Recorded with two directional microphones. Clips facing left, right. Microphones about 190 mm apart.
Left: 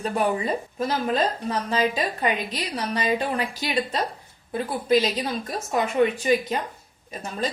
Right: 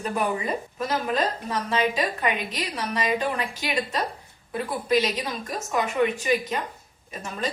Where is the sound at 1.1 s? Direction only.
30° left (ahead or behind).